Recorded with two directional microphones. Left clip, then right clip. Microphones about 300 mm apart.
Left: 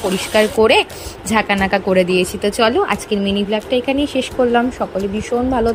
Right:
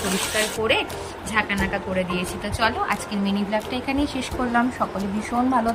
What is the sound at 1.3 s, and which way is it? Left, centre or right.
Speech, centre.